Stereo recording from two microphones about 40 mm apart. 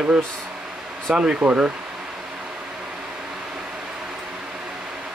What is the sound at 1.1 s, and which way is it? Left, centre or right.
Speech, right.